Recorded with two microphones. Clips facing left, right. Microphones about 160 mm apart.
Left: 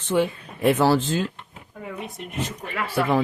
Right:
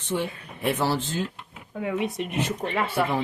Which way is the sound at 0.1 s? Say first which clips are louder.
Left 6 dB; 90° left.